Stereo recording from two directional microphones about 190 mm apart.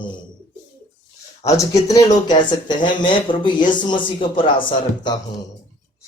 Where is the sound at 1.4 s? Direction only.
15° left (ahead or behind).